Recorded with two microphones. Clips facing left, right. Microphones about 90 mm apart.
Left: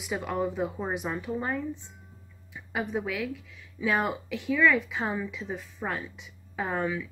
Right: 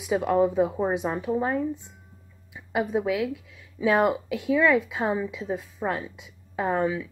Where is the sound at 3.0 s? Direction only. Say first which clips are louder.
Right 6 dB; 20° right (ahead or behind).